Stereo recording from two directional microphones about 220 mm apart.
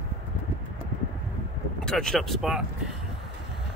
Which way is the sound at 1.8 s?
5° left (ahead or behind).